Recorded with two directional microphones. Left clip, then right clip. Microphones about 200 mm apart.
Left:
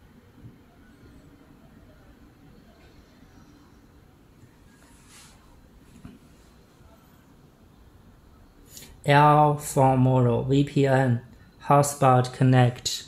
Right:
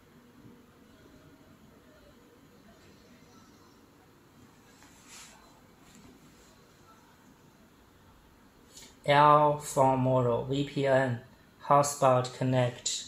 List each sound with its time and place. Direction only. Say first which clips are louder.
9.0 s speech: left 3 dB; 45° left (ahead or behind)